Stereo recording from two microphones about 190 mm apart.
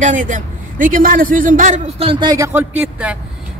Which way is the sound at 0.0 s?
40° right (ahead or behind).